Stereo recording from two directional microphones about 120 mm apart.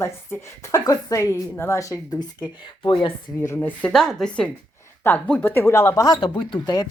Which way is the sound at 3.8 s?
5° left (ahead or behind).